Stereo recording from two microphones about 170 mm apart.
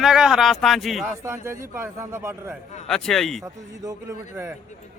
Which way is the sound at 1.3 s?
15° right (ahead or behind).